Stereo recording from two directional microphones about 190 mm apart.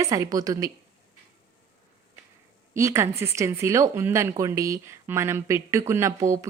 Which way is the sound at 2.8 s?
15° right (ahead or behind).